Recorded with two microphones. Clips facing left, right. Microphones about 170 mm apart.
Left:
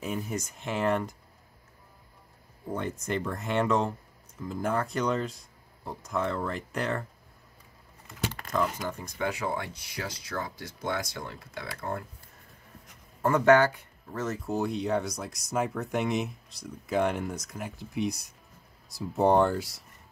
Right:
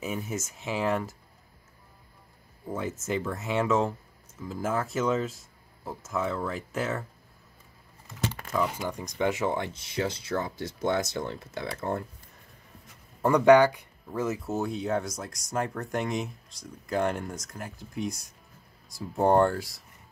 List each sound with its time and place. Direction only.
0.0 s speech: centre (ahead or behind)
2.7 s speech: 5° right (ahead or behind)
8.5 s speech: 5° right (ahead or behind); by 12.0 s 25° right (ahead or behind)
13.2 s speech: 15° right (ahead or behind); by 19.8 s centre (ahead or behind)